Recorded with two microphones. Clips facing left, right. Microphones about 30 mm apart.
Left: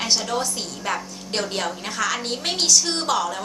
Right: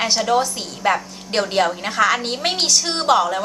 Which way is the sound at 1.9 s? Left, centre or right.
Right.